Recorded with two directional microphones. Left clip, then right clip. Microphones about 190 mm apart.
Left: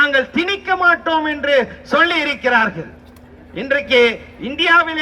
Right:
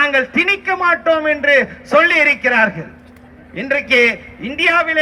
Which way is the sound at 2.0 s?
50° right (ahead or behind).